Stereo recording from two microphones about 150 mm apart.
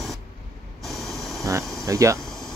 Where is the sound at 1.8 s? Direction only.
20° right (ahead or behind).